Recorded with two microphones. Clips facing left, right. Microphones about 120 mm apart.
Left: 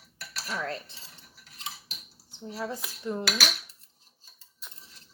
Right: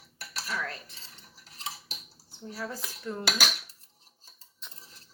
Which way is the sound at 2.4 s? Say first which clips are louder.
Left 3 dB; 20° left (ahead or behind).